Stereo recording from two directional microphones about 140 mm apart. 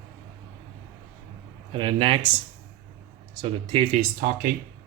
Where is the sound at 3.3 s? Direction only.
40° right (ahead or behind).